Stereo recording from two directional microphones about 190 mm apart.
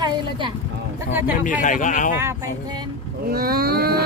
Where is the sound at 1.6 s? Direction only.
45° left (ahead or behind).